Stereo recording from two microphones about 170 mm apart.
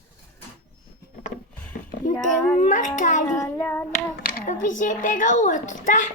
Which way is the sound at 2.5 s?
50° left (ahead or behind).